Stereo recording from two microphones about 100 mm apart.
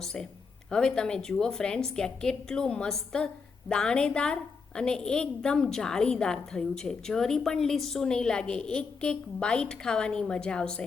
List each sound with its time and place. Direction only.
0.0 s a woman's voice: 5° left (ahead or behind)